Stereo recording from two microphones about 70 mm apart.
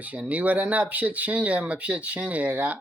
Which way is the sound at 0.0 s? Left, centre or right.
Right.